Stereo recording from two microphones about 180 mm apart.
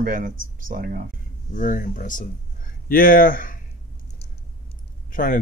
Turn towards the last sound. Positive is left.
turn(degrees=50)  # may be behind; listen again after turning